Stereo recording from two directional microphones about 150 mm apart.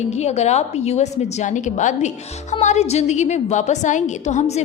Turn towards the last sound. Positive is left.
turn(degrees=50)  # may be behind; listen again after turning